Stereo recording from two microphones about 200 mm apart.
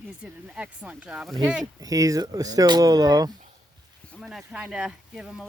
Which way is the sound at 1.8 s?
15° right (ahead or behind).